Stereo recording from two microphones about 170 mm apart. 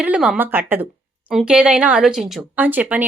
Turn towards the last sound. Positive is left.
turn(degrees=-10)  # may be behind; listen again after turning